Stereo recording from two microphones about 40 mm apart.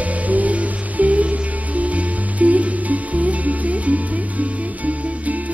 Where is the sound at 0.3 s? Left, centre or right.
Right.